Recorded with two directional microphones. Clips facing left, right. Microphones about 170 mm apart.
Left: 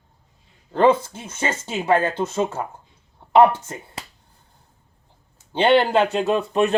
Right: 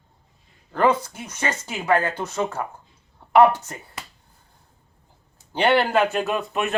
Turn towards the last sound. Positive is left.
turn(degrees=35)  # may be behind; listen again after turning